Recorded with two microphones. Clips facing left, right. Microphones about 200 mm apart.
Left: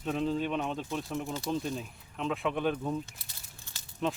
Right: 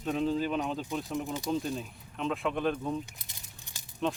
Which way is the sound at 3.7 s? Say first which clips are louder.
Right 1 dB; 15° right (ahead or behind).